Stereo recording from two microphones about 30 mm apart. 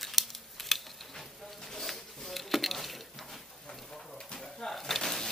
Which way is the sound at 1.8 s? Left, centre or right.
Centre.